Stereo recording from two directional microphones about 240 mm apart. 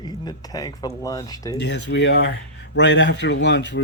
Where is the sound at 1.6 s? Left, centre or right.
Left.